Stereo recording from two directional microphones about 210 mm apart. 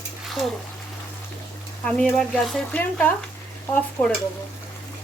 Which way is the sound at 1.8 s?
5° left (ahead or behind).